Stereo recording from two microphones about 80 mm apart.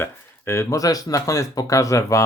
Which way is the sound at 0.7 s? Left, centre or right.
Left.